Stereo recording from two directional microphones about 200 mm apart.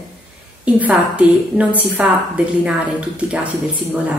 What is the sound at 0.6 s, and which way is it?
A woman's voice, 5° right (ahead or behind).